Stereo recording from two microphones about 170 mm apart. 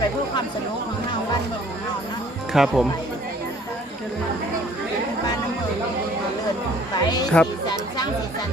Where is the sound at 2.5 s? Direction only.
Centre (ahead or behind).